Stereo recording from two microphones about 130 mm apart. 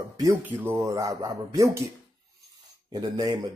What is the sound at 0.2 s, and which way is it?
Speech, 20° right (ahead or behind).